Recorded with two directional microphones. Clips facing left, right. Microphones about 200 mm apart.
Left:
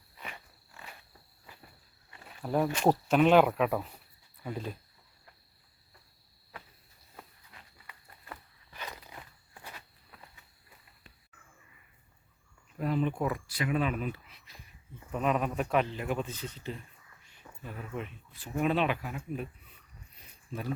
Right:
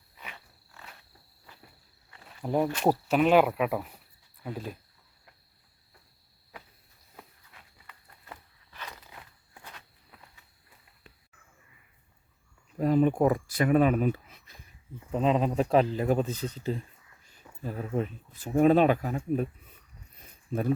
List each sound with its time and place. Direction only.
2.4 s speech: 15° right (ahead or behind)
12.8 s speech: 45° right (ahead or behind)
15.1 s speech: 25° right (ahead or behind); by 19.5 s 45° right (ahead or behind)
20.5 s speech: 50° right (ahead or behind)